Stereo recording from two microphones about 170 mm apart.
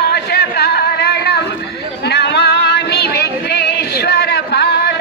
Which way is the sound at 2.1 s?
80° left.